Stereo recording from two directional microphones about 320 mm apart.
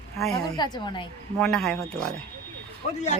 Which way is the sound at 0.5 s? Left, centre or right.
Centre.